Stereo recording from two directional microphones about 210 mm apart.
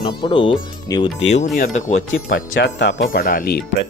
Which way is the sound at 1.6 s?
35° left (ahead or behind).